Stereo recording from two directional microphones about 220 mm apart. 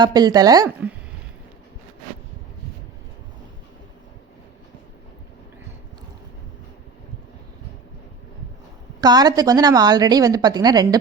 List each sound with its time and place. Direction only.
0.0 s a woman's voice: 20° right (ahead or behind)
9.0 s a woman's voice: 20° right (ahead or behind)